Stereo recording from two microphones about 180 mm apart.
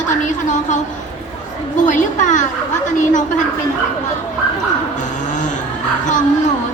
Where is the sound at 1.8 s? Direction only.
45° left (ahead or behind).